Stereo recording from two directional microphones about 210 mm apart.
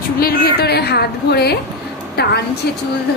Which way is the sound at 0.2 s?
45° left (ahead or behind).